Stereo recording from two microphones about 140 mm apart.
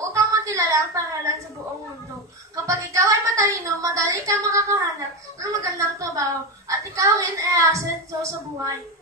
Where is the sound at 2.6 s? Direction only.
20° right (ahead or behind).